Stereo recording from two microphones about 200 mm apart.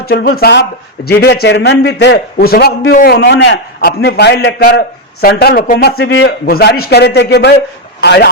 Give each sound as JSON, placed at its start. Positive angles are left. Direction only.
{"t": 0.0, "sound": "a man's voice", "side_deg": 50}